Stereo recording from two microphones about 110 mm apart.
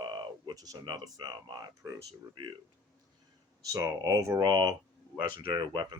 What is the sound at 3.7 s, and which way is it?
Speech, 30° right (ahead or behind).